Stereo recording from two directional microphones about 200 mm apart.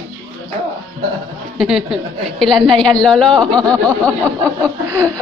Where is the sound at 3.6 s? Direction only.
20° right (ahead or behind).